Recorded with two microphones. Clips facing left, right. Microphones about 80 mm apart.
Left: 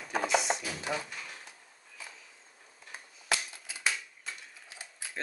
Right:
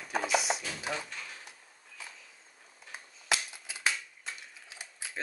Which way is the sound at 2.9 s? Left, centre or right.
Centre.